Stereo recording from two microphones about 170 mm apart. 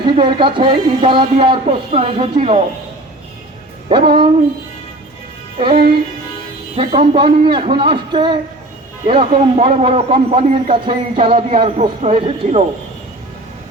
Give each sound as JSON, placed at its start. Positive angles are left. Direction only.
{"t": 0.0, "sound": "speech", "side_deg": -30}
{"t": 3.8, "sound": "speech", "side_deg": -30}
{"t": 6.7, "sound": "speech", "side_deg": -35}